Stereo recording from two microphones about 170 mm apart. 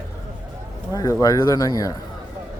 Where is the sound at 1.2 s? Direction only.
20° left (ahead or behind).